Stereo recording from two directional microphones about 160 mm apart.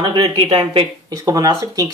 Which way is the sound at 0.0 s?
25° right (ahead or behind).